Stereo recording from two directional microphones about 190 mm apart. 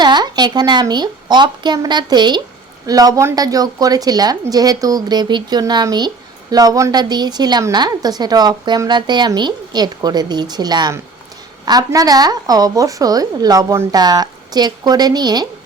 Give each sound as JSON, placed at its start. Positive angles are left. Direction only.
{"t": 0.0, "sound": "a woman's voice", "side_deg": -20}